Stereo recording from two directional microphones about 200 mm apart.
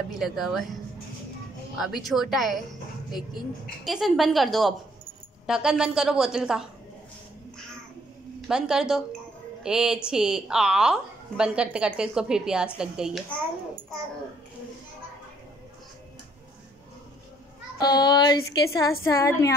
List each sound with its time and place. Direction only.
0.2 s a woman's voice: centre (ahead or behind)
1.8 s a woman's voice: centre (ahead or behind)
3.8 s a woman's voice: centre (ahead or behind)
8.4 s a woman's voice: 5° right (ahead or behind)
17.7 s speech: 20° left (ahead or behind)